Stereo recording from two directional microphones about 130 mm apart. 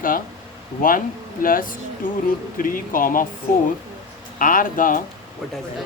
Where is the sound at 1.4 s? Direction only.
90° left.